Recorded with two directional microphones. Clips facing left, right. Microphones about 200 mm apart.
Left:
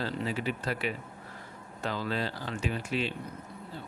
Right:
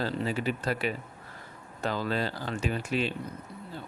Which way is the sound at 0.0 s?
40° right (ahead or behind).